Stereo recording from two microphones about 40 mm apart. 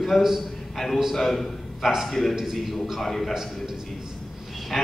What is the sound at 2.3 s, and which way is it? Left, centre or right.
A man's voice, centre.